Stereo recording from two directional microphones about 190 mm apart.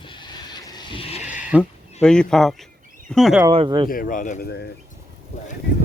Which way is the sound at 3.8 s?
50° left (ahead or behind).